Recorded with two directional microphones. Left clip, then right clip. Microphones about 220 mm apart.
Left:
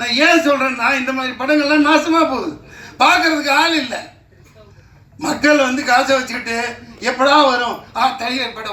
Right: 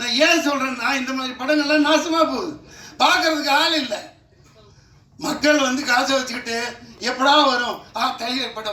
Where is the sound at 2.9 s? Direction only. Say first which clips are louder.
Left 4 dB; 60° right (ahead or behind).